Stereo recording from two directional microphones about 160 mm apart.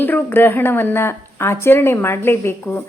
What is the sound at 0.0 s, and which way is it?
A woman's voice, 10° left (ahead or behind).